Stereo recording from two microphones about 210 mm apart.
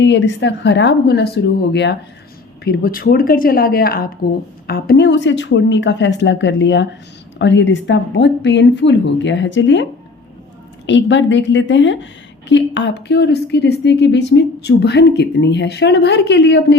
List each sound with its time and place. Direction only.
0.0 s a woman's voice: 60° left (ahead or behind)
10.8 s a woman's voice: 60° left (ahead or behind)